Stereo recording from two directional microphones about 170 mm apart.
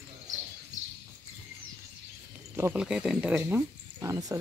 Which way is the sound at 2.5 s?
15° right (ahead or behind).